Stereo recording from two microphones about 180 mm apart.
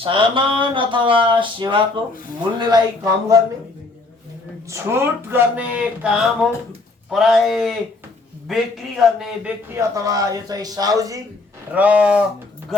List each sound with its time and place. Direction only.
0.0 s speech: 30° right (ahead or behind)
4.7 s speech: 15° right (ahead or behind)
9.0 s speech: centre (ahead or behind)
9.6 s speech: 15° right (ahead or behind)
11.7 s speech: 10° right (ahead or behind)